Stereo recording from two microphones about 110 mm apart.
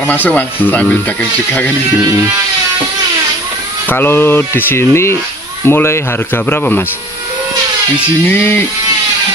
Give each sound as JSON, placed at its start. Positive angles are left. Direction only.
{"t": 0.0, "sound": "speech", "side_deg": 15}
{"t": 3.9, "sound": "speech", "side_deg": 20}
{"t": 8.3, "sound": "speech", "side_deg": 20}